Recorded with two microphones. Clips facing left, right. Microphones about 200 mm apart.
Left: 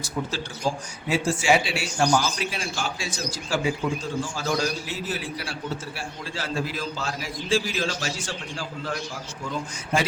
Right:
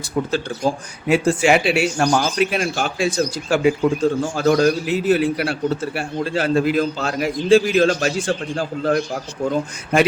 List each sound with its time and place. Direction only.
1.0 s a man's voice: 60° right (ahead or behind)